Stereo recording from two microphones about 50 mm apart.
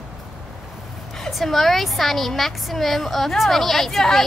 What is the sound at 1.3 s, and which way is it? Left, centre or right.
A woman's voice, centre.